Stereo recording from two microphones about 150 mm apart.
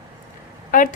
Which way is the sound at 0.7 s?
60° left (ahead or behind).